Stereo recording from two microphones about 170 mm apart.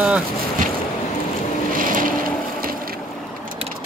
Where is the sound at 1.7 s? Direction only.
55° right (ahead or behind).